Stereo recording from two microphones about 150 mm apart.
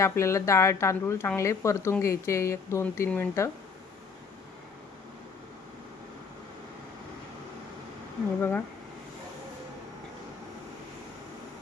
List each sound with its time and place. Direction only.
0.0 s a woman's voice: 20° left (ahead or behind)
8.4 s speech: 15° left (ahead or behind)